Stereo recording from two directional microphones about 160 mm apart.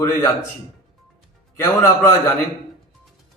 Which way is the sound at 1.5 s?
15° left (ahead or behind).